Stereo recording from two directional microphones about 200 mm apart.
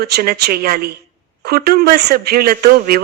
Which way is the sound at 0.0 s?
50° right (ahead or behind).